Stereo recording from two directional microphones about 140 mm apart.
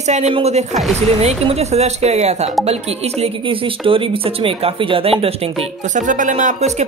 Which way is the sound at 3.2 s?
40° right (ahead or behind).